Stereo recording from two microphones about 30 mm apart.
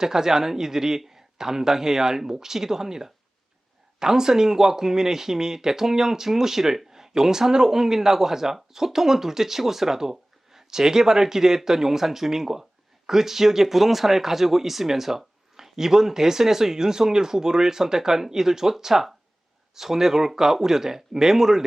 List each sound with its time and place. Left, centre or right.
0.0 s speech: centre